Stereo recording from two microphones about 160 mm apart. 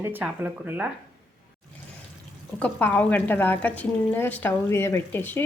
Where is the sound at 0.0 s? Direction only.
10° right (ahead or behind).